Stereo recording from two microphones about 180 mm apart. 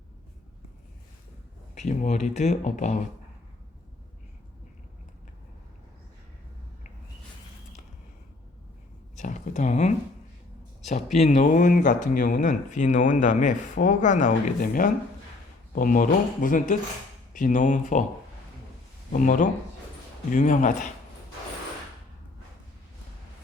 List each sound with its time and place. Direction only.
1.7 s speech: 40° left (ahead or behind)
9.1 s a sound: 40° left (ahead or behind)
10.8 s speech: 40° left (ahead or behind)
19.1 s speech: 45° left (ahead or behind)